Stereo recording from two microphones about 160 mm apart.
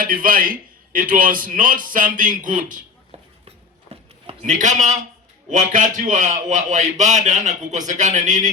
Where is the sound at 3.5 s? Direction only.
40° right (ahead or behind).